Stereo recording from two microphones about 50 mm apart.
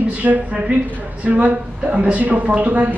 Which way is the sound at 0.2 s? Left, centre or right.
Right.